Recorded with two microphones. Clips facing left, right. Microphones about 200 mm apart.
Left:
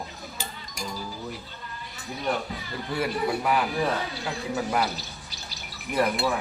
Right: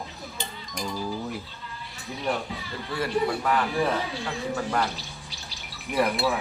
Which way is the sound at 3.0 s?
10° left (ahead or behind).